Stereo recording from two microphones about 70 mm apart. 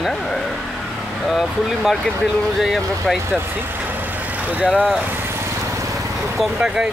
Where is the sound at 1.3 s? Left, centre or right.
Centre.